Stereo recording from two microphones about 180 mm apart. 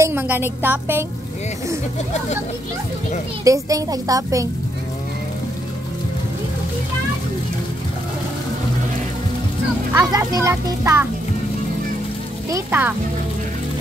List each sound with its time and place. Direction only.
0.0 s a child's voice: 15° right (ahead or behind)
3.4 s a woman's voice: 20° right (ahead or behind)
9.9 s a child's voice: 15° right (ahead or behind)
12.4 s a child's voice: 15° right (ahead or behind)